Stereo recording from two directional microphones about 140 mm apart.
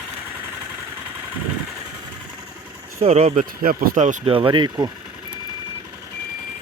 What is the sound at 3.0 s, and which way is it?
Speech, 50° right (ahead or behind).